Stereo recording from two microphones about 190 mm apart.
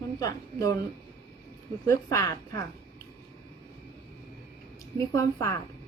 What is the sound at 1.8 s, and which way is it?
Speech, 15° left (ahead or behind).